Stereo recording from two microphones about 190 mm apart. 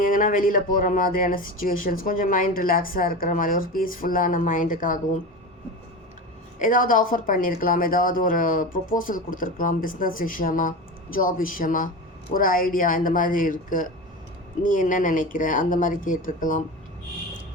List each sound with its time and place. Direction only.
0.0 s speech: 45° left (ahead or behind)
6.6 s speech: 45° left (ahead or behind)